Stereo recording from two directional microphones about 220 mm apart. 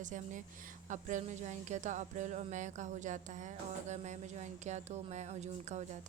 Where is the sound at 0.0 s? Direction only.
35° right (ahead or behind).